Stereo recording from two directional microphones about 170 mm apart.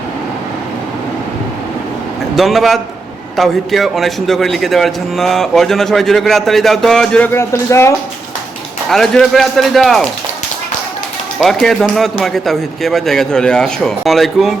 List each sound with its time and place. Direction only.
2.3 s a man's voice: centre (ahead or behind); by 7.9 s 15° left (ahead or behind)
8.9 s a man's voice: centre (ahead or behind)
11.4 s a man's voice: centre (ahead or behind)